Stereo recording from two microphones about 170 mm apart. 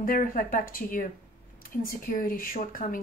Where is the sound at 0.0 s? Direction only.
55° left (ahead or behind).